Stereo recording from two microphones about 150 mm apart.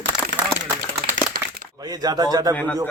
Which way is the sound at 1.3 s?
70° right (ahead or behind).